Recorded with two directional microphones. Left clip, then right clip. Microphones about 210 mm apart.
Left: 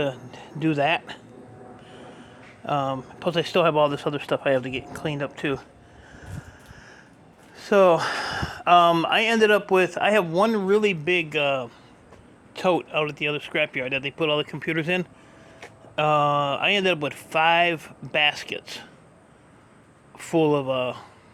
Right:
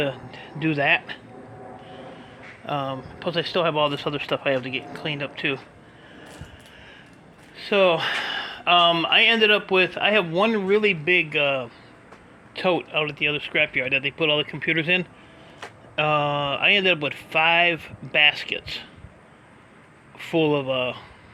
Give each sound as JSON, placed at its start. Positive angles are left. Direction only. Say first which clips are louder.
{"t": 0.0, "sound": "speech", "louder": "right 1 dB", "side_deg": 20}
{"t": 2.6, "sound": "speech", "louder": "left 3 dB", "side_deg": 35}
{"t": 7.7, "sound": "speech", "louder": "left 2 dB", "side_deg": 35}
{"t": 9.6, "sound": "speech", "louder": "even", "side_deg": 10}
{"t": 20.3, "sound": "speech", "louder": "even", "side_deg": 25}